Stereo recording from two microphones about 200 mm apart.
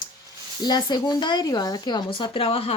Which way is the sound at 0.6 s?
20° left (ahead or behind).